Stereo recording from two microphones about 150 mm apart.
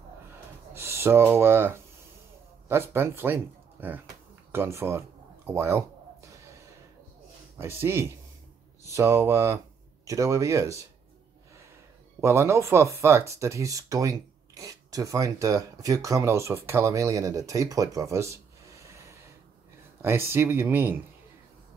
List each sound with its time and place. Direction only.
0.7 s speech: 15° right (ahead or behind)
5.5 s a sound: 15° right (ahead or behind)
7.5 s speech: 15° right (ahead or behind)
12.2 s speech: 20° right (ahead or behind)